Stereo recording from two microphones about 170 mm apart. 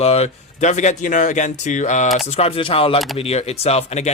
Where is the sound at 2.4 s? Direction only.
35° left (ahead or behind).